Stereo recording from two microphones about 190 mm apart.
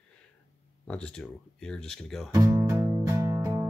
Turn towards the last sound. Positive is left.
turn(degrees=-15)  # may be behind; listen again after turning